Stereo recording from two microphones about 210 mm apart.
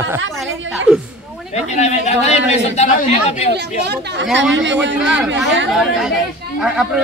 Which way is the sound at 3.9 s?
55° right (ahead or behind).